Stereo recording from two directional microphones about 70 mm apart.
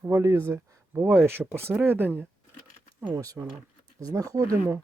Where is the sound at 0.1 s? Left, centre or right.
Right.